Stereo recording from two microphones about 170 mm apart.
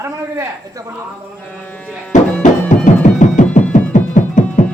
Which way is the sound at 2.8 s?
45° left (ahead or behind).